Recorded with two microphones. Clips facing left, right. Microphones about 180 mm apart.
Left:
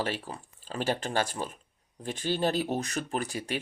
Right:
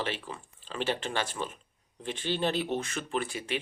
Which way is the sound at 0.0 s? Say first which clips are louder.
Left 2 dB; 40° left (ahead or behind).